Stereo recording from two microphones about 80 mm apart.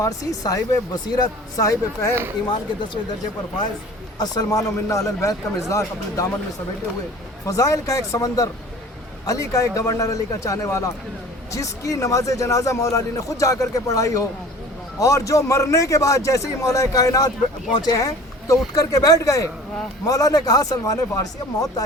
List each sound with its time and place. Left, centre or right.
0.0 s speech: left
4.2 s speech: left
7.4 s a man's voice: left